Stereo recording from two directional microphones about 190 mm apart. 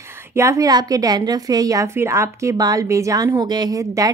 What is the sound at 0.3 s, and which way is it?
A woman's voice, 15° right (ahead or behind).